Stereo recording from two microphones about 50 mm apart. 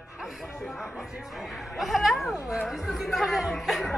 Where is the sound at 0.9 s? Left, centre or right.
Centre.